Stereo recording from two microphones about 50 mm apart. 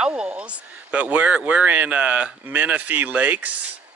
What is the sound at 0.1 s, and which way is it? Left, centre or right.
Speech, right.